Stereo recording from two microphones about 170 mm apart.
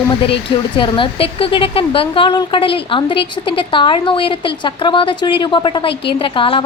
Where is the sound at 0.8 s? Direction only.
30° left (ahead or behind).